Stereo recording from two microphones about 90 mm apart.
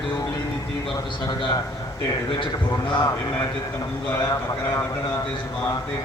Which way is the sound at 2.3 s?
60° left (ahead or behind).